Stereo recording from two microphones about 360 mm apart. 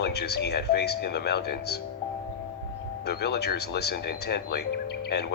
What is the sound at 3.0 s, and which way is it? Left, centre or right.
Speech, left.